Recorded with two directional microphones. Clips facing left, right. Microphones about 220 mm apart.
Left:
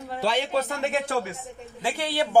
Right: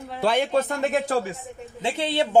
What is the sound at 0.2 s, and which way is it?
Speech, 50° right (ahead or behind).